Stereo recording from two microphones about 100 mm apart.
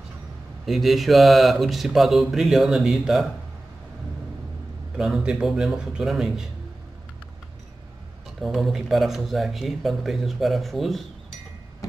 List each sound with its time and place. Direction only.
0.7 s speech: centre (ahead or behind)
4.9 s speech: 5° right (ahead or behind)
8.4 s speech: centre (ahead or behind)